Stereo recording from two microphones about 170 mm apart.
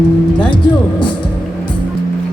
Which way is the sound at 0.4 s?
25° left (ahead or behind).